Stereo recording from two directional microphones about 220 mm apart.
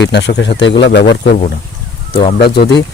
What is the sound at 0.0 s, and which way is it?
Speech, 50° left (ahead or behind).